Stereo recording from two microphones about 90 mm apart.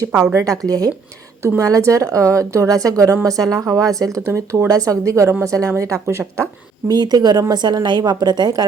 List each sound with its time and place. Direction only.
0.1 s speech: 15° right (ahead or behind)
0.6 s a woman's voice: 40° right (ahead or behind)
4.3 s a woman's voice: 30° right (ahead or behind)
6.9 s a woman's voice: 50° right (ahead or behind)